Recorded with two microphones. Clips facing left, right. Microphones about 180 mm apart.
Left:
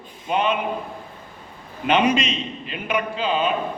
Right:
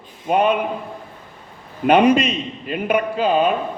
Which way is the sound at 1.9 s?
55° right (ahead or behind).